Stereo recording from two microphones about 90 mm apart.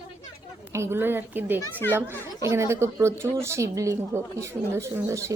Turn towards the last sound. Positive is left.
turn(degrees=-35)  # may be behind; listen again after turning